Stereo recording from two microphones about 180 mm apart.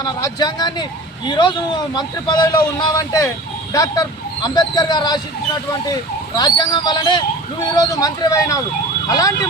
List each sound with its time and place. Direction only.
0.0 s a man's voice: 25° left (ahead or behind)
6.3 s a man's voice: 20° left (ahead or behind)